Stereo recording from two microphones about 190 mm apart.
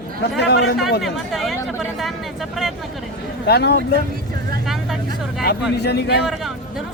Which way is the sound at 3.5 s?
60° left (ahead or behind).